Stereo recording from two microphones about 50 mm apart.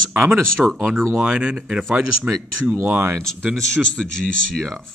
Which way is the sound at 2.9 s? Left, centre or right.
Right.